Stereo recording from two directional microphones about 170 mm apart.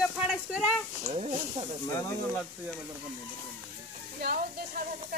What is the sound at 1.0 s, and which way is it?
Speech, 35° right (ahead or behind).